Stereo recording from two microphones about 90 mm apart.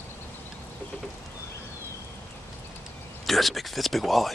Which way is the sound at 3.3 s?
Centre (ahead or behind).